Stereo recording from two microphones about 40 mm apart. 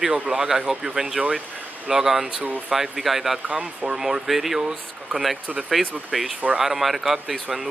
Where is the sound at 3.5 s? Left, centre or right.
Right.